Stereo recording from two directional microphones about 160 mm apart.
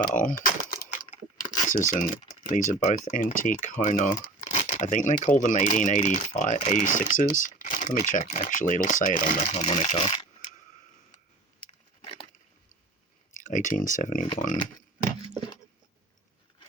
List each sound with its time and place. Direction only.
0.1 s a sound: 55° left (ahead or behind)
2.2 s typing: 55° left (ahead or behind)
2.8 s speech: 55° left (ahead or behind)
4.4 s a sound: 40° left (ahead or behind)
4.9 s speech: 55° left (ahead or behind)
13.3 s speech: 55° left (ahead or behind)